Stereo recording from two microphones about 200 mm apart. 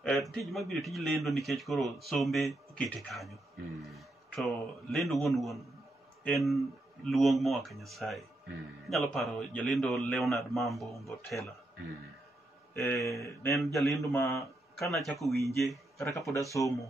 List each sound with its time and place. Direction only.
0.0 s a man's voice: 5° left (ahead or behind)
11.1 s a man's voice: 15° left (ahead or behind)
12.7 s a man's voice: 15° left (ahead or behind)
13.7 s a man's voice: centre (ahead or behind)
14.0 s a man's voice: 15° left (ahead or behind)
14.8 s a man's voice: centre (ahead or behind)
16.3 s a man's voice: 15° left (ahead or behind)